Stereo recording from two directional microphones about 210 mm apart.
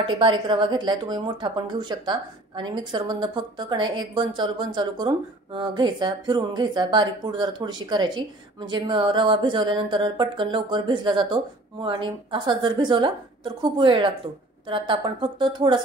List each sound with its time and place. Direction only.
0.0 s a woman's voice: 25° right (ahead or behind)